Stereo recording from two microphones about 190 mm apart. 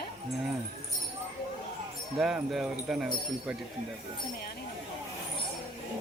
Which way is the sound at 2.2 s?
Centre (ahead or behind).